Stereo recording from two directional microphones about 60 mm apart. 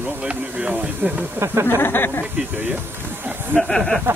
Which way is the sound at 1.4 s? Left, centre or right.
Right.